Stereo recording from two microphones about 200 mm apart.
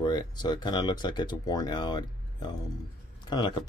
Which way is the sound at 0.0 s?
20° left (ahead or behind).